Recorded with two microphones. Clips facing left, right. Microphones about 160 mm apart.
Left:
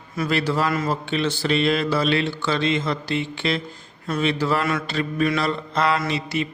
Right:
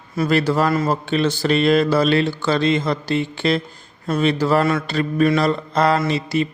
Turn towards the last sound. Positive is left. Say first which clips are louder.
# right 5 dB
turn(degrees=-35)  # may be behind; listen again after turning